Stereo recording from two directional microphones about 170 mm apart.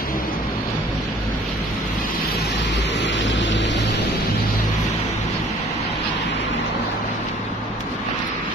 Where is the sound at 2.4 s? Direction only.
90° left.